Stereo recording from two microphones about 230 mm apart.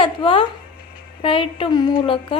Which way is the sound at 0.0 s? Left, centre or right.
Left.